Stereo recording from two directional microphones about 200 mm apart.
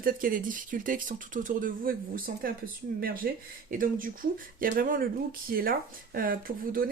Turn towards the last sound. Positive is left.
turn(degrees=-45)  # may be behind; listen again after turning